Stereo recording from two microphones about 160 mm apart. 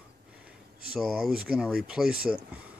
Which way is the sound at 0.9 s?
5° right (ahead or behind).